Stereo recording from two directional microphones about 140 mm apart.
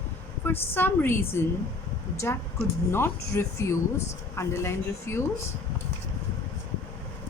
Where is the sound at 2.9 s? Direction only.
20° left (ahead or behind).